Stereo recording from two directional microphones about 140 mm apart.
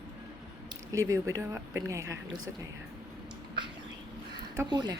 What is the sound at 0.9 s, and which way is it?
Speech, 25° right (ahead or behind).